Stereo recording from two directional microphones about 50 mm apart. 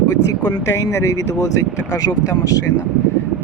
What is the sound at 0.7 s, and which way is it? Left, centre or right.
Speech, left.